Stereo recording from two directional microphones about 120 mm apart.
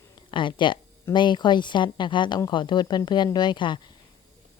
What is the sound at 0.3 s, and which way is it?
A woman's voice, 45° left (ahead or behind).